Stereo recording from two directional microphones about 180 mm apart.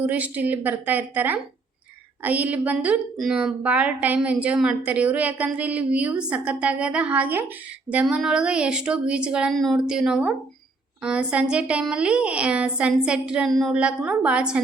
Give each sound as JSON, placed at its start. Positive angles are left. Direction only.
{"t": 0.0, "sound": "a woman's voice", "side_deg": -10}